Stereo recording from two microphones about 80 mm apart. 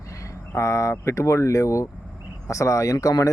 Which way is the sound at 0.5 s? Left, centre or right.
Left.